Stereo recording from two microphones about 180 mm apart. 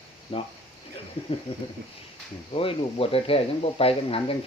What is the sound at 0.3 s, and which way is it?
Speech, 30° left (ahead or behind).